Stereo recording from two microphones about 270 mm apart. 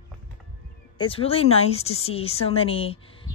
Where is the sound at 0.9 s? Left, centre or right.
Centre.